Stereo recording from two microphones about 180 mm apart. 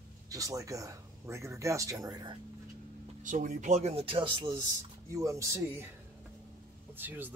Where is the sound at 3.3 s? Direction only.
45° right (ahead or behind); by 5.9 s 15° right (ahead or behind).